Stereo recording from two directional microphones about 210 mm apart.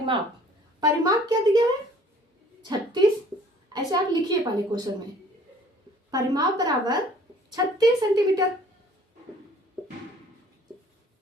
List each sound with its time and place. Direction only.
0.8 s a woman's voice: 20° right (ahead or behind)
6.1 s a woman's voice: 20° right (ahead or behind)